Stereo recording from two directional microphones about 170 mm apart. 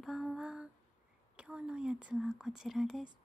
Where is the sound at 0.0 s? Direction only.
5° right (ahead or behind).